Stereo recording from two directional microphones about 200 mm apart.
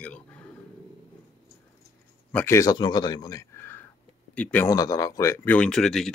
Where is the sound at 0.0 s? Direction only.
5° left (ahead or behind).